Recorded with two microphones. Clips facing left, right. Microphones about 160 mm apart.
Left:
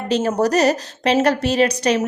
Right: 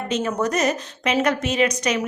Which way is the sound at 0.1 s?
40° left (ahead or behind).